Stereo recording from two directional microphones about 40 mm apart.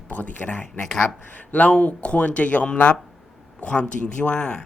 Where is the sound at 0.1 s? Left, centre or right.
Left.